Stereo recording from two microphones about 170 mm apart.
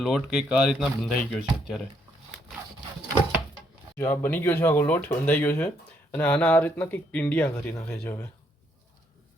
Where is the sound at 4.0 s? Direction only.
10° left (ahead or behind).